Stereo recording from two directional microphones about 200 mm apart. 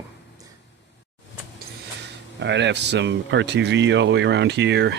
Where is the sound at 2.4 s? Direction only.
60° right (ahead or behind).